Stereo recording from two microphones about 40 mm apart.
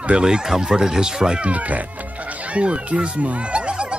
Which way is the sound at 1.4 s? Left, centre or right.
Right.